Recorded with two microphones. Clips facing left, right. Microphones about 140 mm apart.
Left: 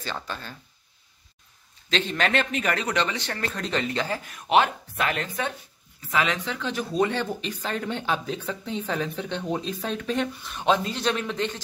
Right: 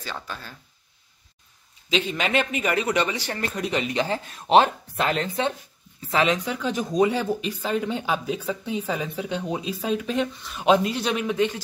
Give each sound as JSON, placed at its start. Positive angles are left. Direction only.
{"t": 0.0, "sound": "speech", "side_deg": -5}
{"t": 1.9, "sound": "speech", "side_deg": -10}
{"t": 6.3, "sound": "speech", "side_deg": -10}